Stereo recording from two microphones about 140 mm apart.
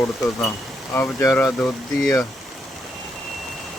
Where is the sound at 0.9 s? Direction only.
15° left (ahead or behind).